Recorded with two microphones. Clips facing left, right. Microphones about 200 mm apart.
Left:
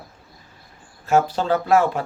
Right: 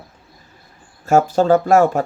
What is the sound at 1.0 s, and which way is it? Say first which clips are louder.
Speech: right 5 dB; 45° right (ahead or behind).